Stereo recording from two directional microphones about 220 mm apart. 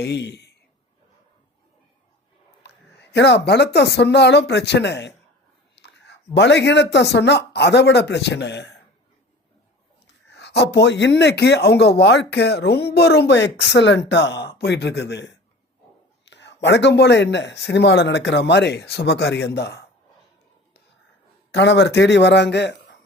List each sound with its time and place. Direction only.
0.0 s speech: 50° left (ahead or behind)
2.6 s speech: 50° left (ahead or behind)
10.2 s speech: 50° left (ahead or behind)
21.5 s speech: 50° left (ahead or behind)